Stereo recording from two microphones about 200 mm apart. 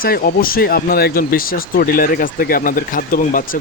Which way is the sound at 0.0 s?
45° left (ahead or behind).